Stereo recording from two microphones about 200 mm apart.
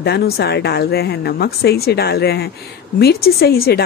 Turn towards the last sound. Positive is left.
turn(degrees=50)  # may be behind; listen again after turning